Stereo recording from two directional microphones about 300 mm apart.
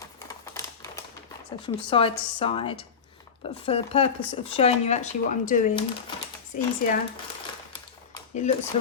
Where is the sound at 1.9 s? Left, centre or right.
Centre.